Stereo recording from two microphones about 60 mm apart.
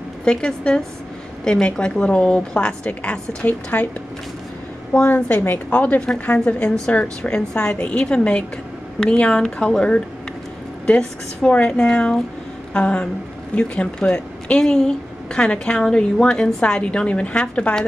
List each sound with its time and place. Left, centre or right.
0.2 s a woman's voice: centre; by 3.9 s left
5.0 s a woman's voice: left